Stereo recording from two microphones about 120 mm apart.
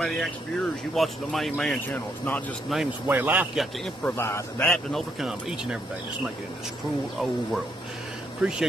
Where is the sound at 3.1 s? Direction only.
15° right (ahead or behind).